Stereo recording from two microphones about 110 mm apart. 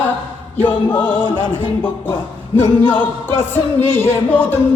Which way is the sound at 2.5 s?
15° left (ahead or behind).